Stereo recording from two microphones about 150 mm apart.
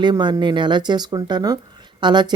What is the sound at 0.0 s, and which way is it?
Speech, 30° right (ahead or behind).